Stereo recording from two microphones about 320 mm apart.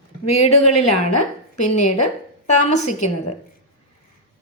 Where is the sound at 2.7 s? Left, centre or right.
Left.